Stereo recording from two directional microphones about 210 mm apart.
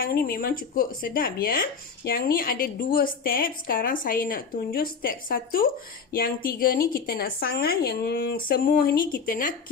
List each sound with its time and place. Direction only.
0.0 s speech: 45° left (ahead or behind)